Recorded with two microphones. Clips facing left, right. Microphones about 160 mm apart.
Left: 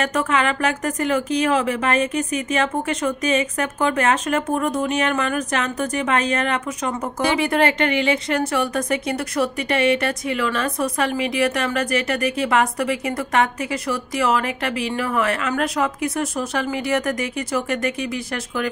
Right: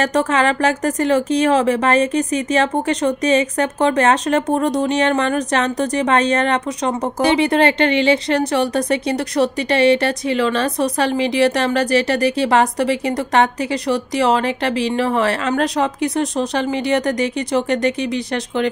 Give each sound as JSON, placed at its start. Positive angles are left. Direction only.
{"t": 0.0, "sound": "speech", "side_deg": -35}